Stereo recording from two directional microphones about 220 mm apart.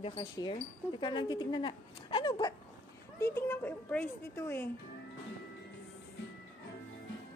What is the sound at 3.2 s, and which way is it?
Speech, 10° left (ahead or behind).